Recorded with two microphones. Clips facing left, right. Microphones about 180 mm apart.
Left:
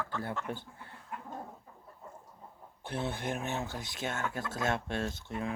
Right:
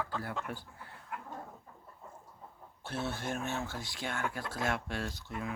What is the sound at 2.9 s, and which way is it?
Speech, 15° left (ahead or behind).